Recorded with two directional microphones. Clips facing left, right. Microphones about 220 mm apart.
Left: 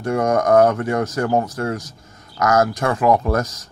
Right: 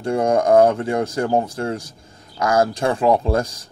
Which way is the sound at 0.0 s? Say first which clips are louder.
Even; 30° right (ahead or behind).